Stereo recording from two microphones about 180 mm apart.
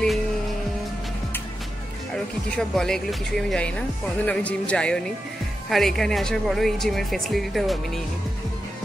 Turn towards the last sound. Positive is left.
turn(degrees=0)  # may be behind; listen again after turning